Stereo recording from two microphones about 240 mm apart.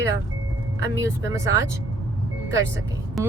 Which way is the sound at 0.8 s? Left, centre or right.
Left.